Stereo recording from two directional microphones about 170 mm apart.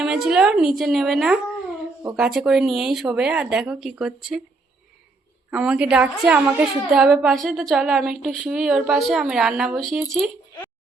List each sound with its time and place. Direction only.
0.0 s a woman's voice: 5° right (ahead or behind)
5.5 s a woman's voice: 5° right (ahead or behind)